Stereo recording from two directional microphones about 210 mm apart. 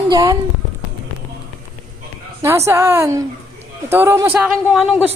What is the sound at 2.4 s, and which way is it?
A man's voice, 15° right (ahead or behind).